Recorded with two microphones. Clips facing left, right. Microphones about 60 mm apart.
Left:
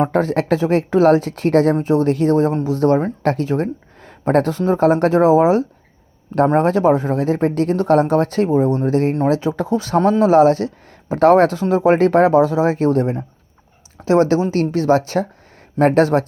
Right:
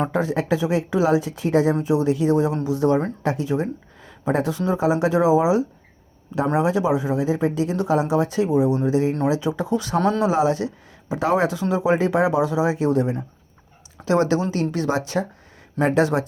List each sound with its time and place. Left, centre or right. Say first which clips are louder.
0.1 s speech: left 5 dB; left
1.8 s speech: left 4 dB; left
4.8 s speech: left 6 dB; left
8.4 s speech: left 3 dB; left
9.3 s speech: left 4 dB; left
10.2 s speech: left 8 dB; left
11.6 s speech: left 6 dB; left